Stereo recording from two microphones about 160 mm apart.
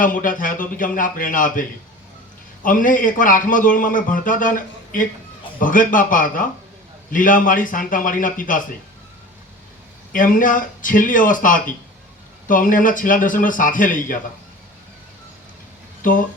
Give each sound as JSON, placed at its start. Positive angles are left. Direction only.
{"t": 0.0, "sound": "a man's voice", "side_deg": 55}
{"t": 2.6, "sound": "a man's voice", "side_deg": 55}
{"t": 10.1, "sound": "a man's voice", "side_deg": 60}
{"t": 16.0, "sound": "a sound", "side_deg": 55}